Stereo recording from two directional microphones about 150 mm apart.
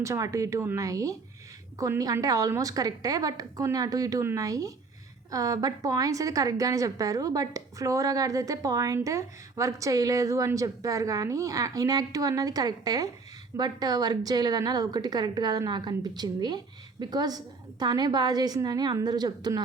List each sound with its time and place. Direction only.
0.0 s a woman's voice: 20° right (ahead or behind)